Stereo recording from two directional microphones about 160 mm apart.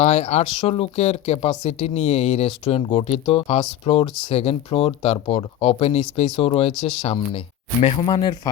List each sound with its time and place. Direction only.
0.0 s speech: 45° left (ahead or behind); by 8.4 s 30° left (ahead or behind)